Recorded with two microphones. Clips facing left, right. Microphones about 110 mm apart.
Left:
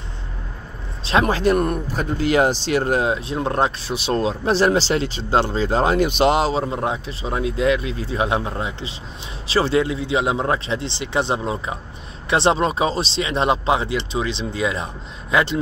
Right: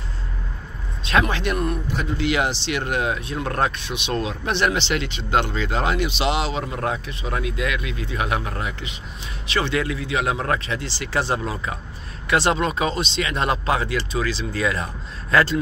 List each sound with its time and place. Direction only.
1.2 s speech: 35° left (ahead or behind)
3.9 s speech: 35° left (ahead or behind)
6.6 s speech: 25° left (ahead or behind)